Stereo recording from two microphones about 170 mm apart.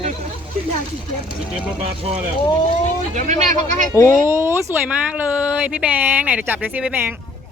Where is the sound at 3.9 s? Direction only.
15° left (ahead or behind).